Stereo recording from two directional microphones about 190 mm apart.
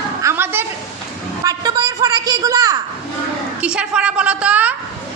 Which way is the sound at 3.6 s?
5° right (ahead or behind).